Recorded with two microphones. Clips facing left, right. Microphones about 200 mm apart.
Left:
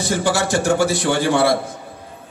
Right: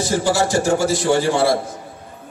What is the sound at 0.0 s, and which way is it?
A man's voice, 60° left (ahead or behind).